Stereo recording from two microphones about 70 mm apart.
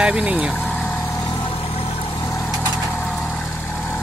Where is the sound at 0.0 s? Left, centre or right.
Centre.